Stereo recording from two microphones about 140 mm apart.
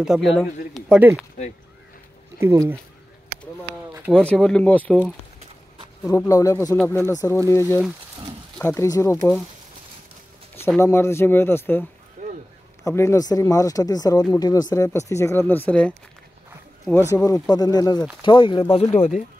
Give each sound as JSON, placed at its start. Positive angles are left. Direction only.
{"t": 0.0, "sound": "speech", "side_deg": -5}
{"t": 1.4, "sound": "speech", "side_deg": 50}
{"t": 2.3, "sound": "speech", "side_deg": -20}
{"t": 4.1, "sound": "speech", "side_deg": 10}
{"t": 6.0, "sound": "speech", "side_deg": 20}
{"t": 10.8, "sound": "speech", "side_deg": 20}
{"t": 12.2, "sound": "a sound", "side_deg": -70}
{"t": 12.8, "sound": "speech", "side_deg": 20}
{"t": 17.1, "sound": "speech", "side_deg": 25}